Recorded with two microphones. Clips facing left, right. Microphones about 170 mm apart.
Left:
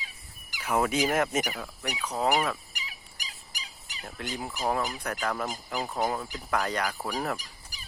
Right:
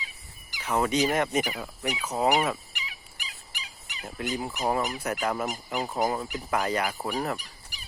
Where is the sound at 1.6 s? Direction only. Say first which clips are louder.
Right 3 dB; 10° right (ahead or behind).